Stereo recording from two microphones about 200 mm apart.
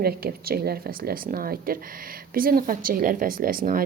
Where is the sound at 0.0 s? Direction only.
50° right (ahead or behind).